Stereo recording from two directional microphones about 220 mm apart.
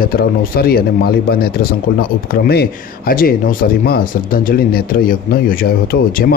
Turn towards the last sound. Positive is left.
turn(degrees=40)  # may be behind; listen again after turning